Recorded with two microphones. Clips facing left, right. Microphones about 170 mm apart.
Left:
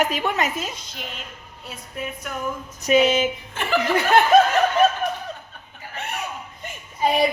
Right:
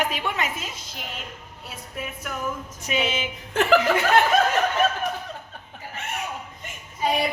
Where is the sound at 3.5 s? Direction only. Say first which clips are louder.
Right 11 dB; 85° right.